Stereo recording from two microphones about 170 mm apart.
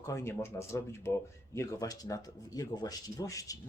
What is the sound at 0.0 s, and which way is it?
Speech, 15° left (ahead or behind).